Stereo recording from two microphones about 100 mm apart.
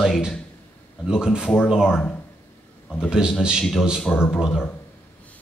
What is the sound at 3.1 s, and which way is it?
Speech, 5° right (ahead or behind).